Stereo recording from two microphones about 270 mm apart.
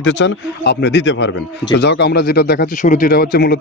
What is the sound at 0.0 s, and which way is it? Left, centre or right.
Speech, left.